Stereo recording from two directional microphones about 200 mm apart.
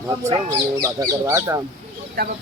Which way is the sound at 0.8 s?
15° right (ahead or behind).